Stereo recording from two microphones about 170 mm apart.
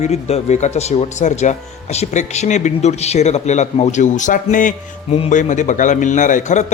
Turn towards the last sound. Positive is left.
turn(degrees=45)  # may be behind; listen again after turning